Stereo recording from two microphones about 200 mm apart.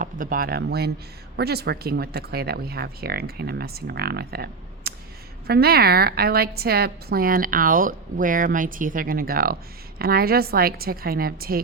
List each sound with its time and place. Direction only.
0.0 s a woman's voice: 45° right (ahead or behind)